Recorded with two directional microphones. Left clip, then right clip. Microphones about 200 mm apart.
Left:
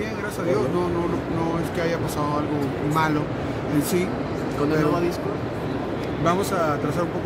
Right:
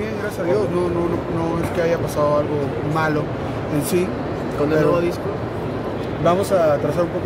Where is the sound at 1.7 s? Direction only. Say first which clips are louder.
Right 5 dB; 5° right (ahead or behind).